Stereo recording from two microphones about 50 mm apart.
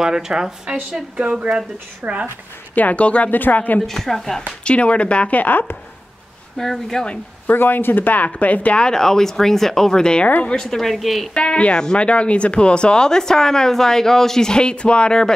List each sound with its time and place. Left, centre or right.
0.0 s a woman's voice: centre
2.0 s speech: right
2.7 s speech: left
3.3 s speech: left
3.8 s speech: centre
4.6 s speech: left
6.6 s speech: centre
7.5 s speech: left
8.8 s speech: centre
10.8 s a woman's voice: centre
11.3 s speech: left